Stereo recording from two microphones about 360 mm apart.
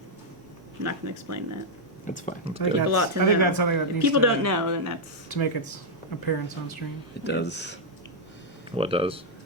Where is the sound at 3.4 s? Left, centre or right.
Left.